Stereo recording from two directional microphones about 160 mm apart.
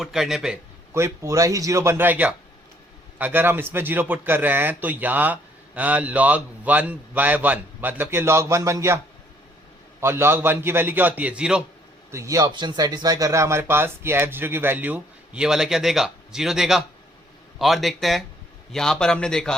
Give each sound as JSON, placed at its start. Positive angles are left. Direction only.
{"t": 0.0, "sound": "speech", "side_deg": 0}
{"t": 0.9, "sound": "a man's voice", "side_deg": -20}
{"t": 10.0, "sound": "a man's voice", "side_deg": -15}
{"t": 12.1, "sound": "a man's voice", "side_deg": -20}